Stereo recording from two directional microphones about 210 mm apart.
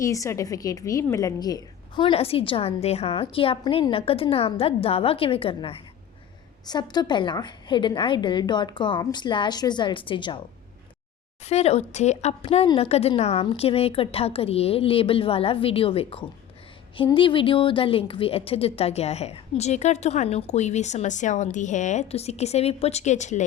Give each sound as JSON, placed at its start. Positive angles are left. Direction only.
{"t": 0.0, "sound": "a woman's voice", "side_deg": 15}
{"t": 11.4, "sound": "a woman's voice", "side_deg": 30}